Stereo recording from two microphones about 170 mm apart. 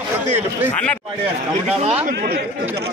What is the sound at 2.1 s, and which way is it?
Speech, 65° right (ahead or behind).